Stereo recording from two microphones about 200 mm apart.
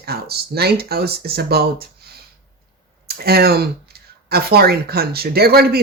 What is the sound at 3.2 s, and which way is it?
Speech, 50° right (ahead or behind).